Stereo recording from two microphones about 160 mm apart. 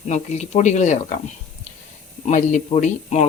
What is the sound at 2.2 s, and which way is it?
Speech, 50° left (ahead or behind).